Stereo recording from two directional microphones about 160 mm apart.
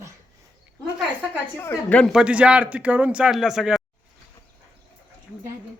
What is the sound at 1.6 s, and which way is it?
Speech, 10° left (ahead or behind).